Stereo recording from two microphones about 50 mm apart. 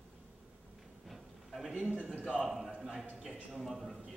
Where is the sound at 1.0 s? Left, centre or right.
Centre.